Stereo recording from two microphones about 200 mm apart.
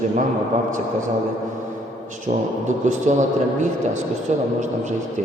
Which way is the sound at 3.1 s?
35° right (ahead or behind).